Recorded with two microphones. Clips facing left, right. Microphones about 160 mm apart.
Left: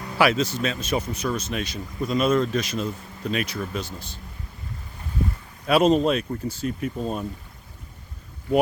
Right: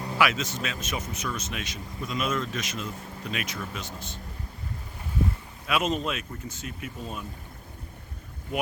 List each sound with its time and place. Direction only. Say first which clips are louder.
0.2 s speech: left 6 dB; 35° left (ahead or behind)
5.6 s speech: left 9 dB; 35° left (ahead or behind)